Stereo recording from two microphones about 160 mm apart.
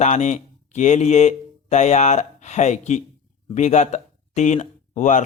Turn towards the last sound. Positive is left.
turn(degrees=50)  # may be behind; listen again after turning